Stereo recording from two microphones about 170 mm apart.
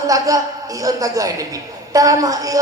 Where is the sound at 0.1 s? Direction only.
20° right (ahead or behind).